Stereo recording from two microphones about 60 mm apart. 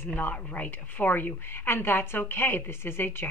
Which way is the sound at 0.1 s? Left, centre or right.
Left.